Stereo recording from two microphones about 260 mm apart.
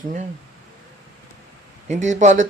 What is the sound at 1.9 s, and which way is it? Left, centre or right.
Speech, right.